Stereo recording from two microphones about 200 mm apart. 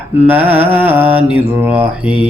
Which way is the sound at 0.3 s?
10° right (ahead or behind).